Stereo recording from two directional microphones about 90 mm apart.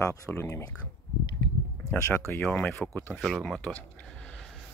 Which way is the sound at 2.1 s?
30° left (ahead or behind).